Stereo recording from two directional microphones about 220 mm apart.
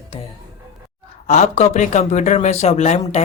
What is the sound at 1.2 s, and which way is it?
Speech, 30° left (ahead or behind).